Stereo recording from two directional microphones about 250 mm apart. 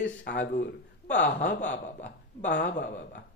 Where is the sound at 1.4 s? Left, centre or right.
Left.